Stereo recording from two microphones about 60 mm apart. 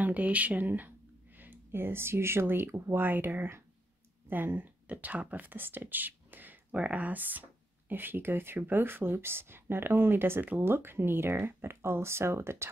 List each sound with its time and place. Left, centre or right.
0.0 s speech: right